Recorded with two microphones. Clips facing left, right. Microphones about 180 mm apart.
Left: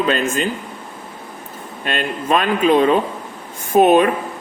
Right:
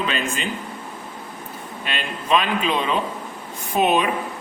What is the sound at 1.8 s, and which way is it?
A man's voice, 50° left (ahead or behind).